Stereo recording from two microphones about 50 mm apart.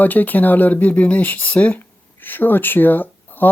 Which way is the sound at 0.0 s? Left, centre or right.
Left.